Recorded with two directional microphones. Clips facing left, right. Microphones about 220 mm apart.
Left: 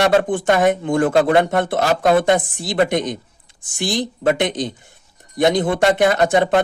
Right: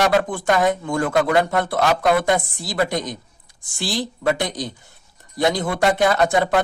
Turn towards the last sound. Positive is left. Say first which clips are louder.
# left 3 dB
turn(degrees=20)  # may be behind; listen again after turning